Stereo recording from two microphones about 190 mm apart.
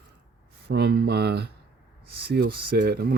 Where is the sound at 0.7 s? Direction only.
60° right (ahead or behind).